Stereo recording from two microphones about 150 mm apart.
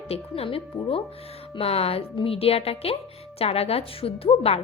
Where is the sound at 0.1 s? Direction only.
40° left (ahead or behind).